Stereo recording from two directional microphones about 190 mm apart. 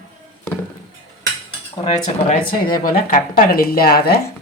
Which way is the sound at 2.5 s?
50° left (ahead or behind).